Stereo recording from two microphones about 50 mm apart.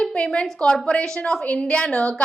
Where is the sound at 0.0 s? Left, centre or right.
Centre.